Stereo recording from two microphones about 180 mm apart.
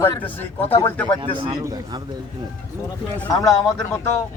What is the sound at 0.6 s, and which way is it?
Speech, 30° left (ahead or behind).